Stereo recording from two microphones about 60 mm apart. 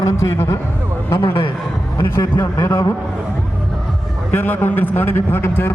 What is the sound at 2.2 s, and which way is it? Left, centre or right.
Speech, left.